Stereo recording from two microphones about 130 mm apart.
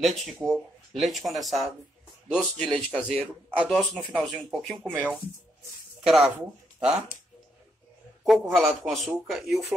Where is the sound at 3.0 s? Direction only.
10° left (ahead or behind).